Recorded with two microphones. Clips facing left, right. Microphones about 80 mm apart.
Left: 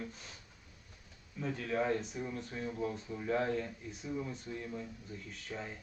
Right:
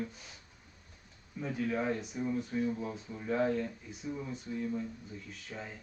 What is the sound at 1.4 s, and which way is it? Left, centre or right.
Speech, centre.